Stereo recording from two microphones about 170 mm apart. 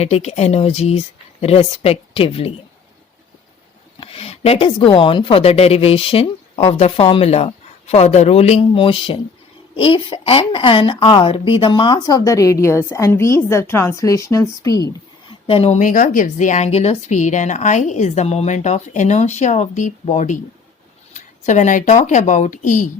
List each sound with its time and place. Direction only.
0.0 s a woman's voice: 40° left (ahead or behind)
4.0 s a woman's voice: 35° left (ahead or behind); by 14.8 s 20° left (ahead or behind)
15.3 s a sound: 30° left (ahead or behind)
15.8 s speech: 50° left (ahead or behind)